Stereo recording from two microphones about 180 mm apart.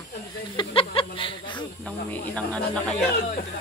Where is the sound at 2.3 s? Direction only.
5° left (ahead or behind).